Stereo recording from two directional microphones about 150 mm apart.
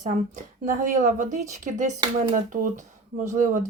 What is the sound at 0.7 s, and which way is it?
Speech, 65° right (ahead or behind).